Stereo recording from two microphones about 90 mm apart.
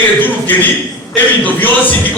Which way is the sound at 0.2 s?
20° left (ahead or behind).